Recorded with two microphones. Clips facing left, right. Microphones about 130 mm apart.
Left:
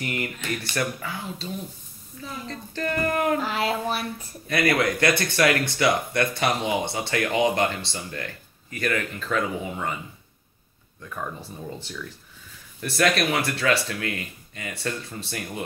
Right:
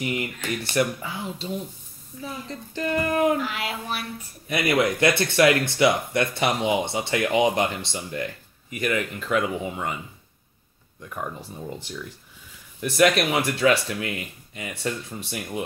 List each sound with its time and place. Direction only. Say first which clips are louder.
0.0 s speech: right 2 dB; 15° right (ahead or behind)
3.3 s a sound: left 3 dB; 35° left (ahead or behind)
4.5 s speech: even; 15° right (ahead or behind)
11.0 s speech: right 1 dB; 15° right (ahead or behind)